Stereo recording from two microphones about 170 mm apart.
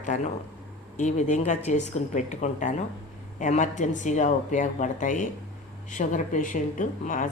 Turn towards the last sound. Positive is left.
turn(degrees=50)  # may be behind; listen again after turning